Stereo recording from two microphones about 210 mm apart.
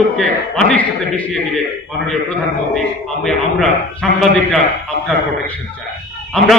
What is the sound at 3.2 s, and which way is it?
A man's voice, centre (ahead or behind).